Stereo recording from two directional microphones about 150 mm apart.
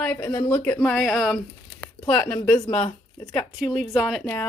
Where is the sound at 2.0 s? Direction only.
10° left (ahead or behind).